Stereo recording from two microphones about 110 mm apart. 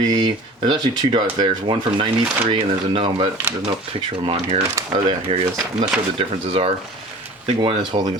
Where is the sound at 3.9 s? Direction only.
70° right (ahead or behind).